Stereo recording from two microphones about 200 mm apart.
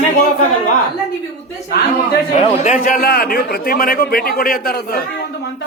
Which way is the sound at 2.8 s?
45° left (ahead or behind).